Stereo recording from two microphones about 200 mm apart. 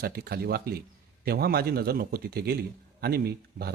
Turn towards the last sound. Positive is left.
turn(degrees=-50)  # may be behind; listen again after turning